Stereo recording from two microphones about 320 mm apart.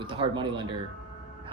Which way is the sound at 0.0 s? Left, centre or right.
Centre.